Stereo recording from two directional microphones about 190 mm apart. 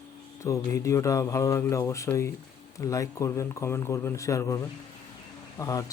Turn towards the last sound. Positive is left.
turn(degrees=20)  # may be behind; listen again after turning